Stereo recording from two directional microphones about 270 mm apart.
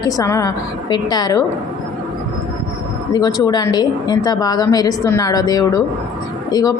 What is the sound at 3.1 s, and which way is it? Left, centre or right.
A woman's voice, centre.